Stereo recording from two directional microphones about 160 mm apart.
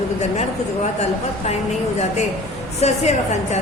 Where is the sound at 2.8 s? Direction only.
45° left (ahead or behind).